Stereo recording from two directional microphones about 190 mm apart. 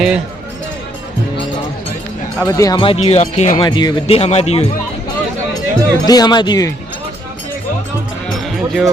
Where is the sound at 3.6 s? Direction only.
25° left (ahead or behind).